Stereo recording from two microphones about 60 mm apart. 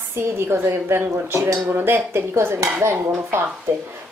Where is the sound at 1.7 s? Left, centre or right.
Right.